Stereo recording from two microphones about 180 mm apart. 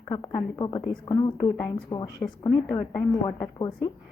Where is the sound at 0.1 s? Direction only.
25° left (ahead or behind).